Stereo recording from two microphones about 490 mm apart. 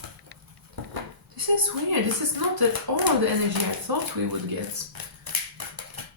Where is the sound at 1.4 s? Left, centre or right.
Right.